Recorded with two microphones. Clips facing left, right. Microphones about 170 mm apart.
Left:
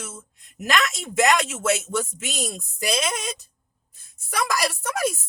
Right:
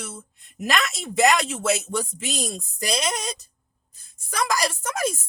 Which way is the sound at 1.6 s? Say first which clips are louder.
Even; 35° right (ahead or behind).